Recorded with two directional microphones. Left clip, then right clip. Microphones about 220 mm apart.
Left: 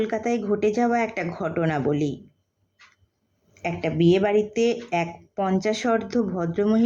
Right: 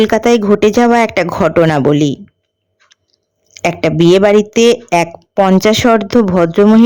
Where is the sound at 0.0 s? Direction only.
45° right (ahead or behind).